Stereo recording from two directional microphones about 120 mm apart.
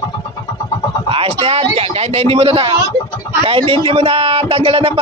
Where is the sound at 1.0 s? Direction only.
50° right (ahead or behind).